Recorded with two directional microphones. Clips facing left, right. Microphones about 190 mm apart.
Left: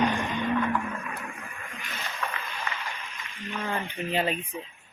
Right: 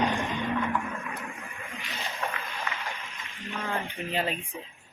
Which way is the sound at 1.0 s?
15° right (ahead or behind).